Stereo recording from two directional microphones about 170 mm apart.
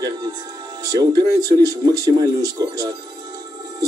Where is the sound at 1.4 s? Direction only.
20° right (ahead or behind).